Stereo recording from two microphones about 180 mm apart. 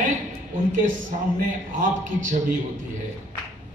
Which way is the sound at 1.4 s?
45° right (ahead or behind).